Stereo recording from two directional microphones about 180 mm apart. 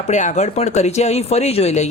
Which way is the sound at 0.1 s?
40° left (ahead or behind).